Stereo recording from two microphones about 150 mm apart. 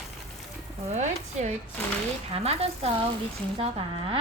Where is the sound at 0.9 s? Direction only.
50° right (ahead or behind).